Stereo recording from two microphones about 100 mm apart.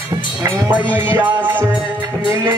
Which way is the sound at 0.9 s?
20° right (ahead or behind).